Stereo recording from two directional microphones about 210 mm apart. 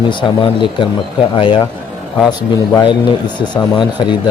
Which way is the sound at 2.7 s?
20° left (ahead or behind).